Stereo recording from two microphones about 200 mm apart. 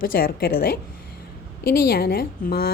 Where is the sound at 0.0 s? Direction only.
50° left (ahead or behind).